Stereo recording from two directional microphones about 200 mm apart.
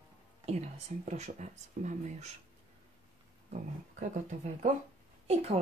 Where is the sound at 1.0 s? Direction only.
35° right (ahead or behind).